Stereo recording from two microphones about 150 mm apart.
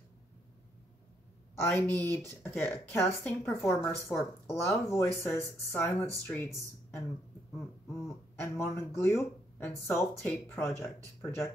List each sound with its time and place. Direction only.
1.6 s speech: 15° left (ahead or behind)
8.4 s speech: 15° left (ahead or behind)